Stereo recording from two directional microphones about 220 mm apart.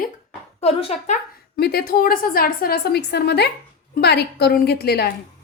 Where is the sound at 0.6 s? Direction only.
30° left (ahead or behind).